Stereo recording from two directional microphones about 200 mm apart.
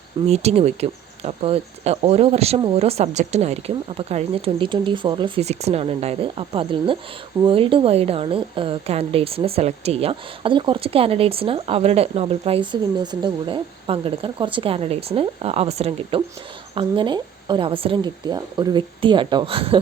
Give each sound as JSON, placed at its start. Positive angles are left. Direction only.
{"t": 0.3, "sound": "a woman's voice", "side_deg": -35}